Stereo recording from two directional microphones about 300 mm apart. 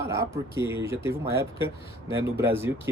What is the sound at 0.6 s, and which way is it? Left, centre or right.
Speech, centre.